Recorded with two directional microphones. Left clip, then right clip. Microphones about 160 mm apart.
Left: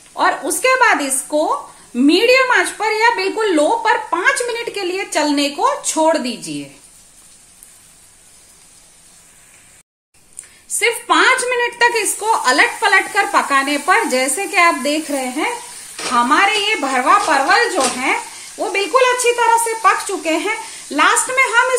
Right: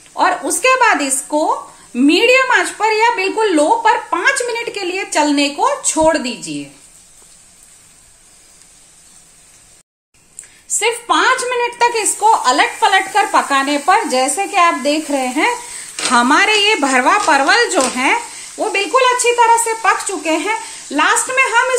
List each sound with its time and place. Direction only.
0.1 s a woman's voice: 5° right (ahead or behind)
10.7 s a woman's voice: centre (ahead or behind)
16.1 s speech: 40° right (ahead or behind)
18.6 s a woman's voice: 10° right (ahead or behind)